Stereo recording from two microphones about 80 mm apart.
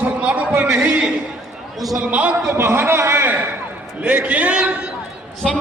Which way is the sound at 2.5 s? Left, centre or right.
Right.